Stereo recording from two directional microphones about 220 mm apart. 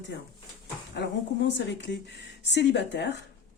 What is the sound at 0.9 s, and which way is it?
Speech, 50° left (ahead or behind).